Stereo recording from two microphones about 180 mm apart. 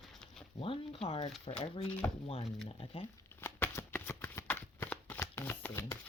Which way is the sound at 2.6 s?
30° left (ahead or behind).